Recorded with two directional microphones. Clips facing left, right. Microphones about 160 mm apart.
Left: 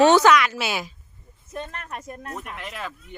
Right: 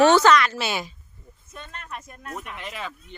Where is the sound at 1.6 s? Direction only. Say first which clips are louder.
Left 3 dB; 50° left (ahead or behind).